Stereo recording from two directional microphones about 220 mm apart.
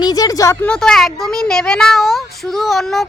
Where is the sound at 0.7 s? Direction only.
Centre (ahead or behind).